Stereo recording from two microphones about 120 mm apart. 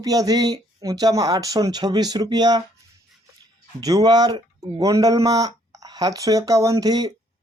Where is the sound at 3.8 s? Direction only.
35° right (ahead or behind).